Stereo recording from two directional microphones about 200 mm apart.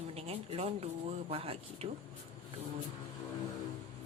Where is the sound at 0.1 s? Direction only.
30° right (ahead or behind).